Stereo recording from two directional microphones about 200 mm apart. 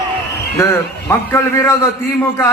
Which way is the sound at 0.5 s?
15° left (ahead or behind).